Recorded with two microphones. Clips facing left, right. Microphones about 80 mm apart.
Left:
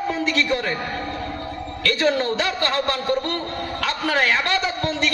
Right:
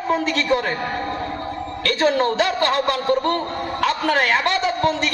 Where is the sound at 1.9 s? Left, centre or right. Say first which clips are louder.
Right 2 dB; right.